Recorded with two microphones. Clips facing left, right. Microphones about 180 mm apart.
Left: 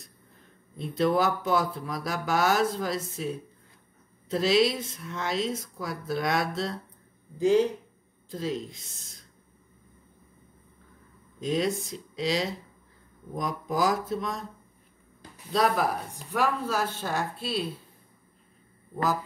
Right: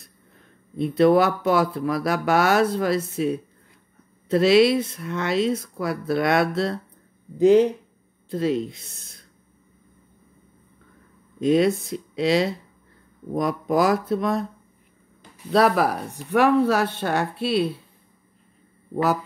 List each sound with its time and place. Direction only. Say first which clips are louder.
0.7 s speech: right 8 dB; 65° right (ahead or behind)
11.4 s speech: right 9 dB; 65° right (ahead or behind)
15.5 s speech: right 6 dB; 70° right (ahead or behind)